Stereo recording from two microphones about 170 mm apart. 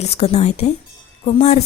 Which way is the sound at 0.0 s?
40° left (ahead or behind).